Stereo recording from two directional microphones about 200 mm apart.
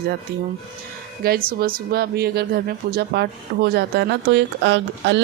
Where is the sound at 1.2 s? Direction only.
50° right (ahead or behind).